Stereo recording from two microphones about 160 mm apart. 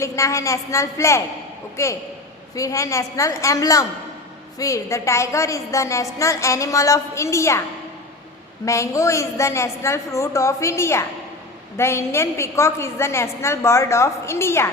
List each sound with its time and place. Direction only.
0.0 s a woman's voice: 20° left (ahead or behind)
8.6 s a woman's voice: 20° left (ahead or behind)